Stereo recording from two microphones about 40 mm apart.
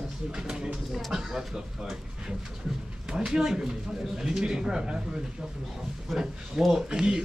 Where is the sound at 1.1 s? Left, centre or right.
Centre.